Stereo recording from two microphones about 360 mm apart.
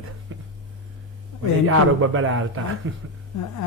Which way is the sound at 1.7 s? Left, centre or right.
Right.